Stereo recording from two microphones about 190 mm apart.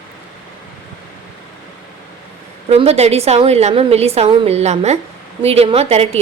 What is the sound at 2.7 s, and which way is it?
A woman's voice, 35° right (ahead or behind).